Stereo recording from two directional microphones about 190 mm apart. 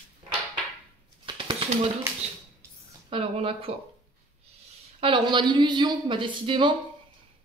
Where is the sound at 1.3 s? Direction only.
25° right (ahead or behind).